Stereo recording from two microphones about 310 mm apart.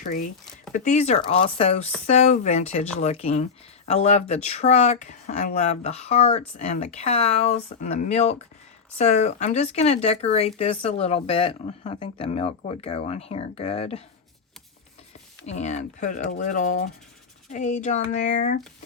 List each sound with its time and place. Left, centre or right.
0.0 s speech: left
15.4 s speech: left